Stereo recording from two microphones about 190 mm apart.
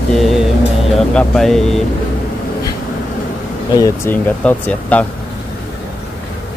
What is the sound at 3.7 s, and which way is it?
Speech, 15° left (ahead or behind).